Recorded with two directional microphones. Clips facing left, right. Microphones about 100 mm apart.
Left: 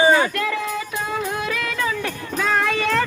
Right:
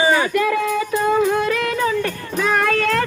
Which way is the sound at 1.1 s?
5° left (ahead or behind).